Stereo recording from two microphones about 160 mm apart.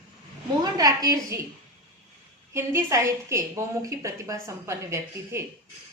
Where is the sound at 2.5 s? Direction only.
15° right (ahead or behind).